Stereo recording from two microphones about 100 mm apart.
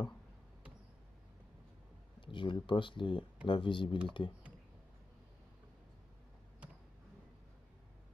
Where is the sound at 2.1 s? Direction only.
55° left (ahead or behind).